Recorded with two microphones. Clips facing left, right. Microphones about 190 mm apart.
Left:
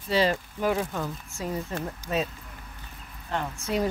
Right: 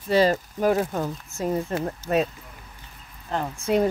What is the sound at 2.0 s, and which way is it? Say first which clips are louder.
Speech: right 6 dB; 15° left (ahead or behind).